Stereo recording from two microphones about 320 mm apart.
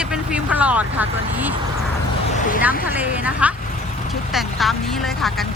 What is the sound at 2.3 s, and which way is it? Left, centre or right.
Vehicle, left.